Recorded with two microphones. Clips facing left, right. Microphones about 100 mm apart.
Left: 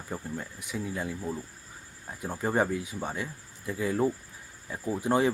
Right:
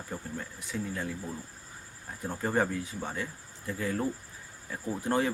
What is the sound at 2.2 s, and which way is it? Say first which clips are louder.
Speech: left 2 dB; 10° left (ahead or behind).